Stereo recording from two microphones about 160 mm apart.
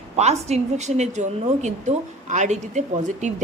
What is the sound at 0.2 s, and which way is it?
A woman's voice, 45° right (ahead or behind).